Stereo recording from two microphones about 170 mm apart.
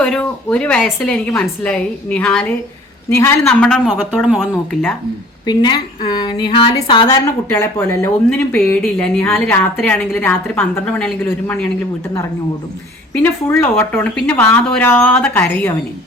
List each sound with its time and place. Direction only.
0.0 s speech: 5° left (ahead or behind)
3.4 s a woman's voice: 5° left (ahead or behind)
5.5 s a woman's voice: 25° left (ahead or behind)
7.4 s a woman's voice: 15° left (ahead or behind)
13.5 s speech: 15° left (ahead or behind)